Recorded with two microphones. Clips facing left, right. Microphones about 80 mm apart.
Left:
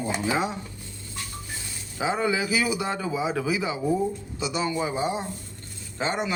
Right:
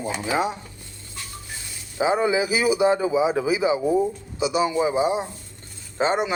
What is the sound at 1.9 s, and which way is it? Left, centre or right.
A man's voice, right.